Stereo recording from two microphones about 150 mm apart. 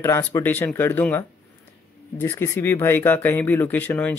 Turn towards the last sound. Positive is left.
turn(degrees=10)  # may be behind; listen again after turning